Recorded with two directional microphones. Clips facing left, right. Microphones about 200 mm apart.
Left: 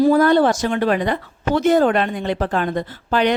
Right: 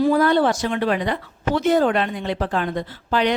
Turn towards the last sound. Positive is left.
turn(degrees=50)  # may be behind; listen again after turning